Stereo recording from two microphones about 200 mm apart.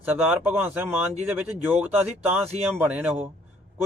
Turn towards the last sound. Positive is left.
turn(degrees=-10)  # may be behind; listen again after turning